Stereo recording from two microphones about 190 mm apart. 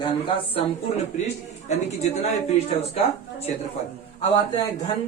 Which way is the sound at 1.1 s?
40° left (ahead or behind).